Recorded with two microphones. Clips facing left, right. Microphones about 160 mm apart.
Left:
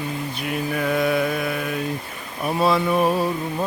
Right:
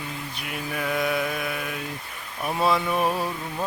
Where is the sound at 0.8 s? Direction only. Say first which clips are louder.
Left 4 dB; 5° right (ahead or behind).